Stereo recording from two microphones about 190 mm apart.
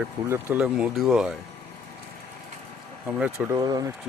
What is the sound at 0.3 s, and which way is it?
Speech, 10° right (ahead or behind).